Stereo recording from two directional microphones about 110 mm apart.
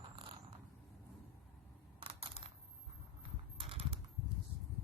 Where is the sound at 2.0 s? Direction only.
50° right (ahead or behind).